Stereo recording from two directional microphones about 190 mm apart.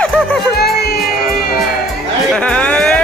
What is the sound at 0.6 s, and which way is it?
Music, 55° left (ahead or behind).